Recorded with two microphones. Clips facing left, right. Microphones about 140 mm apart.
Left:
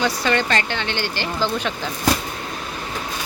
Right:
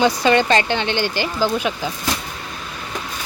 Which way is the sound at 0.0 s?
20° right (ahead or behind).